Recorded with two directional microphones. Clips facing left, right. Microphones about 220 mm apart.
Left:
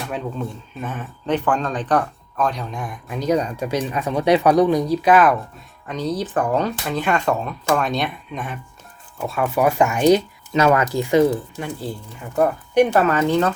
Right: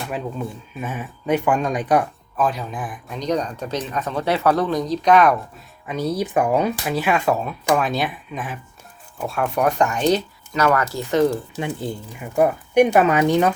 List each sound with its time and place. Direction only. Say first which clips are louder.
0.1 s speech: even; 5° right (ahead or behind)
5.9 s speech: right 1 dB; 10° right (ahead or behind); by 10.2 s 10° left (ahead or behind)
10.5 s speech: left 3 dB; 20° left (ahead or behind)
11.5 s speech: right 2 dB; 20° right (ahead or behind)